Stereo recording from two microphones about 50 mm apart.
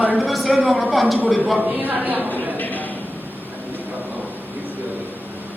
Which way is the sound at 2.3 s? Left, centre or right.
Left.